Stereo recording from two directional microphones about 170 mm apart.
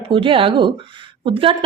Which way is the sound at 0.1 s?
30° right (ahead or behind).